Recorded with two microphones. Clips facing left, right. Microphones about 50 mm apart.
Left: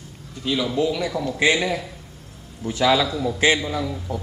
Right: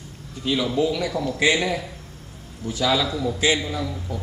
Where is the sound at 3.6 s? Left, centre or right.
Centre.